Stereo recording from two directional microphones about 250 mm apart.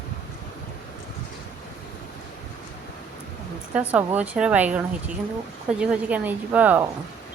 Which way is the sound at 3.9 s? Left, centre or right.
Centre.